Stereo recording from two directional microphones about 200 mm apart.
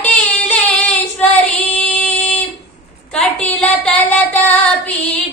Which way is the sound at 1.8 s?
5° left (ahead or behind).